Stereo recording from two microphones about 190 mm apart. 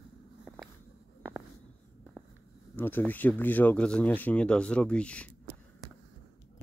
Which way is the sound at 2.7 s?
10° left (ahead or behind).